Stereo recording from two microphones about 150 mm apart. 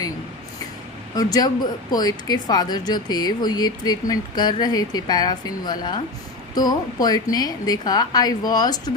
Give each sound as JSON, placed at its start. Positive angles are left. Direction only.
{"t": 1.1, "sound": "a woman's voice", "side_deg": 25}